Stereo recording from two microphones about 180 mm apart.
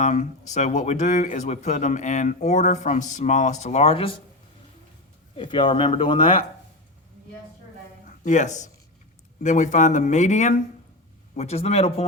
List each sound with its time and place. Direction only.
0.0 s speech: 40° left (ahead or behind)
5.4 s speech: 30° left (ahead or behind)
8.0 s a man's voice: 45° left (ahead or behind)